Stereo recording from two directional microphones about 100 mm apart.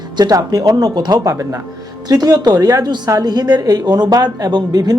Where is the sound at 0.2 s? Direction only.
40° right (ahead or behind).